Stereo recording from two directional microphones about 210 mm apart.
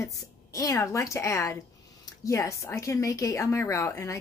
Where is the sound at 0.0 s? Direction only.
15° left (ahead or behind).